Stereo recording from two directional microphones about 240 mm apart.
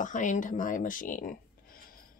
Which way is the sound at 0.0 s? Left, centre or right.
Left.